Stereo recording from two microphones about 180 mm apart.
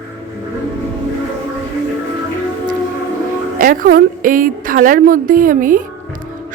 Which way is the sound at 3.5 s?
50° right (ahead or behind).